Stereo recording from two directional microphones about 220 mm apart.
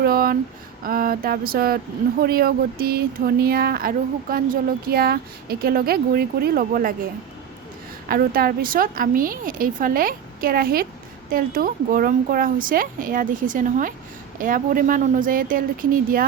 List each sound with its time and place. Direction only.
0.0 s a sound: 40° right (ahead or behind)
0.9 s a woman's voice: 40° right (ahead or behind)
8.0 s a woman's voice: 40° right (ahead or behind)